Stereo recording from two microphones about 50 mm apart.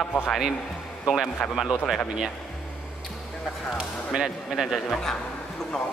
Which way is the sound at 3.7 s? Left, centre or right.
Centre.